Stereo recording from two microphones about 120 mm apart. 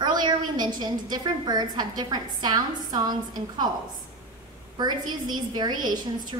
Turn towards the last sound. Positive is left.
turn(degrees=-35)  # may be behind; listen again after turning